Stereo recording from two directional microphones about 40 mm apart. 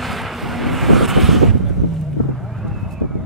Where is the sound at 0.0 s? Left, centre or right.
Centre.